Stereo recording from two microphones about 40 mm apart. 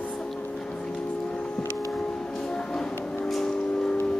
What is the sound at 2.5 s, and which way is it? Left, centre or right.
Music, centre.